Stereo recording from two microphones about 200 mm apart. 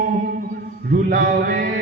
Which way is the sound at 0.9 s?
45° right (ahead or behind).